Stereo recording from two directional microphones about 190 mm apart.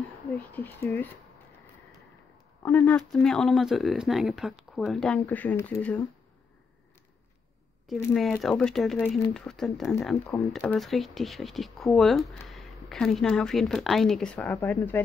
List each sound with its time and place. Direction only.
0.4 s speech: 10° left (ahead or behind)
2.6 s speech: 10° left (ahead or behind)
7.8 s speech: centre (ahead or behind)